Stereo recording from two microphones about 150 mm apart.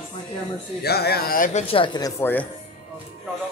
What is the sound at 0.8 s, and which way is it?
Speech, 90° left.